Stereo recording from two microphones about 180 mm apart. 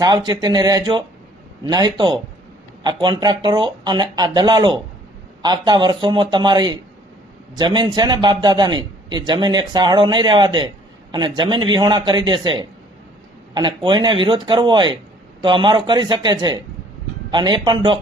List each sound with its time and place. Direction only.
0.0 s a man's voice: 20° right (ahead or behind)